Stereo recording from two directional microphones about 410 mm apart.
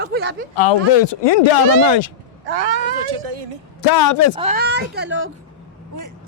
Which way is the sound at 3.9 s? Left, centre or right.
Left.